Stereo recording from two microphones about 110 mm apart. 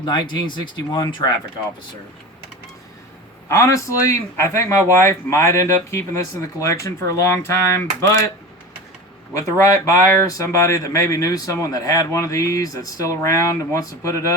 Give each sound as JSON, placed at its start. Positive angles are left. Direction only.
{"t": 0.0, "sound": "speech", "side_deg": 45}
{"t": 3.5, "sound": "speech", "side_deg": 25}
{"t": 9.3, "sound": "speech", "side_deg": 30}